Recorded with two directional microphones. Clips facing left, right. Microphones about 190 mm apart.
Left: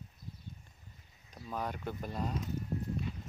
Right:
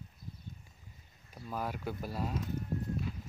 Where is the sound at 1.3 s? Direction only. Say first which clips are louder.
Even; 5° right (ahead or behind).